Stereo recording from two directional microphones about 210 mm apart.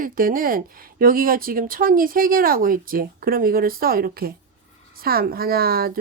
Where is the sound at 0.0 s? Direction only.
40° right (ahead or behind).